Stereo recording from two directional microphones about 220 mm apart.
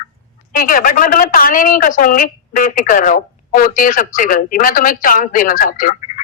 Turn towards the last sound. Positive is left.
turn(degrees=40)  # may be behind; listen again after turning